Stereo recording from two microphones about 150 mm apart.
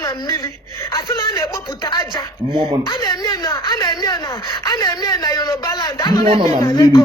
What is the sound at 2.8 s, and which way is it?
A woman's voice, 25° left (ahead or behind).